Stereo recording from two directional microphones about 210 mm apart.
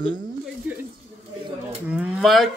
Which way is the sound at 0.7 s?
5° right (ahead or behind).